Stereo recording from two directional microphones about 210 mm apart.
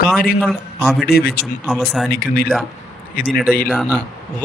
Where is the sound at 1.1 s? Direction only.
50° left (ahead or behind).